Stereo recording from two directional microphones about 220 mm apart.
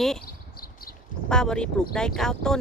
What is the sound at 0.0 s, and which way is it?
Speech, centre (ahead or behind).